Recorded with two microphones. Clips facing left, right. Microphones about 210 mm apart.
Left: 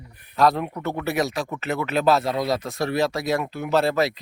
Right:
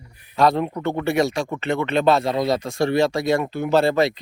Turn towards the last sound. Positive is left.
turn(degrees=0)  # may be behind; listen again after turning